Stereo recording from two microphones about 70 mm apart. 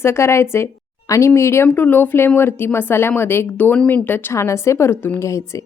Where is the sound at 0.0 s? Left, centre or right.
Left.